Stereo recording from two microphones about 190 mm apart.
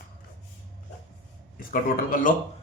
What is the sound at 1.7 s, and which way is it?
Speech, 45° left (ahead or behind).